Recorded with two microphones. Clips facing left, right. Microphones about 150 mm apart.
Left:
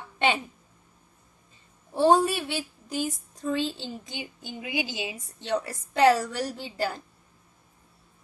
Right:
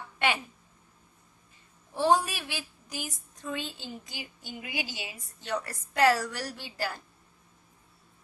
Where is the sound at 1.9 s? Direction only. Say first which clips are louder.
Left 5 dB; 30° left (ahead or behind).